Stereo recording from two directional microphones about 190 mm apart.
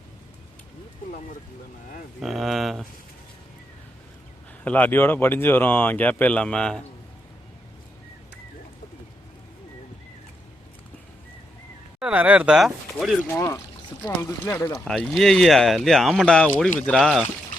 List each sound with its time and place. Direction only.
2.2 s speech: centre (ahead or behind)
4.6 s speech: 10° left (ahead or behind)
11.9 s speech: 5° right (ahead or behind)
14.0 s speech: 15° left (ahead or behind)
14.8 s speech: centre (ahead or behind)